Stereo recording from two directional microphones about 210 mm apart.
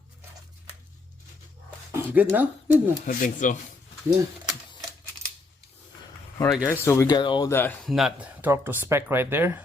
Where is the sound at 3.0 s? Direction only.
40° left (ahead or behind).